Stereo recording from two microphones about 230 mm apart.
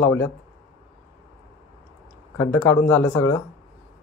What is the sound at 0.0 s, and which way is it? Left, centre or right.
Speech, centre.